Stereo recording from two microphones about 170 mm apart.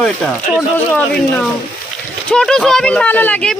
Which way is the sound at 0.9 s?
10° left (ahead or behind).